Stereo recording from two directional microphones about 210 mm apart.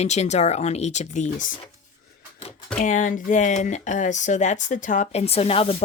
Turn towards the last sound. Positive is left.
turn(degrees=30)  # may be behind; listen again after turning